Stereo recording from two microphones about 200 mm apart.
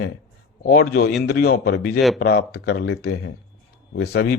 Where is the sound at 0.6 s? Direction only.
45° left (ahead or behind).